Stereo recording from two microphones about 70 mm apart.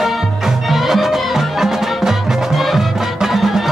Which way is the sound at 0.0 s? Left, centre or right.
Centre.